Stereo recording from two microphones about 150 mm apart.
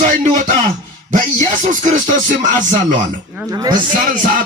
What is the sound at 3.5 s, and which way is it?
Speech, 25° right (ahead or behind).